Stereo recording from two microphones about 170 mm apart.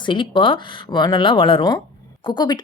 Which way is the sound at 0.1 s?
30° left (ahead or behind).